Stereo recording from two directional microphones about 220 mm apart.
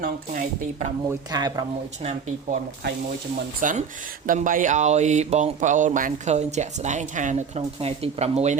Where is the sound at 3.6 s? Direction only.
35° right (ahead or behind).